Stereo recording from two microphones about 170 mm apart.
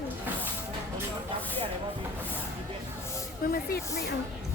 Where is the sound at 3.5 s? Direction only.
65° left (ahead or behind).